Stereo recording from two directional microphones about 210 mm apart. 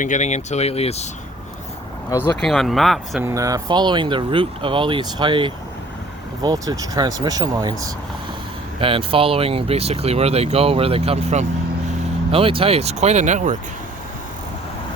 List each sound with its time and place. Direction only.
0.0 s speech: 35° left (ahead or behind)
2.4 s speech: centre (ahead or behind)
3.2 s speech: 15° right (ahead or behind); by 13.6 s 35° right (ahead or behind)